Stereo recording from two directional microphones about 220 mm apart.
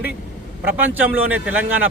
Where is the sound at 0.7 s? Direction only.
10° right (ahead or behind).